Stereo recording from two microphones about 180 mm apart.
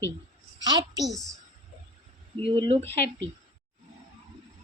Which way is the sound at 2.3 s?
30° right (ahead or behind).